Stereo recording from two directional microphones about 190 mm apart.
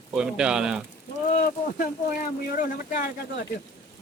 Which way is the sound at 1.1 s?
40° left (ahead or behind).